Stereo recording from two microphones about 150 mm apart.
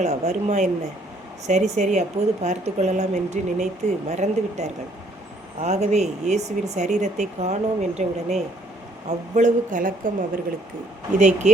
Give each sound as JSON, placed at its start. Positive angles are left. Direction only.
{"t": 0.0, "sound": "a woman's voice", "side_deg": -50}
{"t": 9.0, "sound": "a woman's voice", "side_deg": -55}